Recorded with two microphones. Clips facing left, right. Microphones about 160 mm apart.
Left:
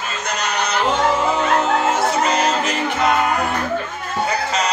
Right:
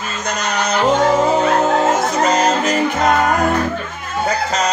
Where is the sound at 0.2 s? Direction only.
40° right (ahead or behind).